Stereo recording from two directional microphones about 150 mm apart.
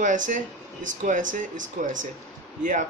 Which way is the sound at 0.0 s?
55° right (ahead or behind).